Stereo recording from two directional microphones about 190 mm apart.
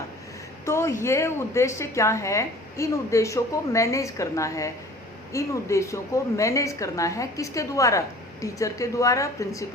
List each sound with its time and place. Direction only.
0.6 s a woman's voice: 15° left (ahead or behind)